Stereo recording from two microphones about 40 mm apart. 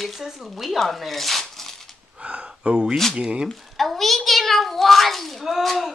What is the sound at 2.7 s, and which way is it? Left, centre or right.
Speech, right.